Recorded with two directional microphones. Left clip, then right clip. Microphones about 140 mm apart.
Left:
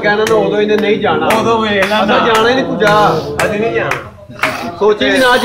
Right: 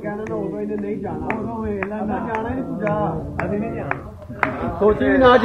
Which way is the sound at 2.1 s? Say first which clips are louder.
Left 16 dB; 40° left (ahead or behind).